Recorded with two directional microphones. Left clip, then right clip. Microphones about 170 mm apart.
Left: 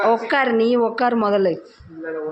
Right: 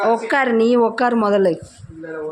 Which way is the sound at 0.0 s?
15° right (ahead or behind).